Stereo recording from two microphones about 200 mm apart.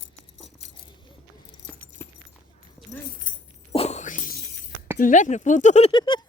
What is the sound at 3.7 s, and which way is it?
Shatter, 35° left (ahead or behind).